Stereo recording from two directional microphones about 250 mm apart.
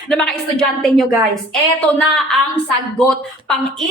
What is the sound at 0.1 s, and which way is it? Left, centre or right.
A woman's voice, centre.